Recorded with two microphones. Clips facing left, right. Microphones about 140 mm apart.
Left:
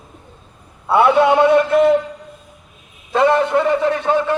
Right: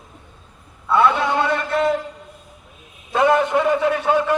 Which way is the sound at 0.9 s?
65° left (ahead or behind).